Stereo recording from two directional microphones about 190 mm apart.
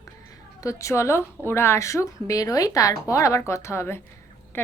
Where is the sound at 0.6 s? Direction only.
15° left (ahead or behind).